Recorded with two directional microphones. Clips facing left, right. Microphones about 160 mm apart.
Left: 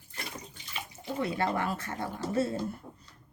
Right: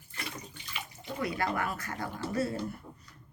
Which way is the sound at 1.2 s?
30° left (ahead or behind).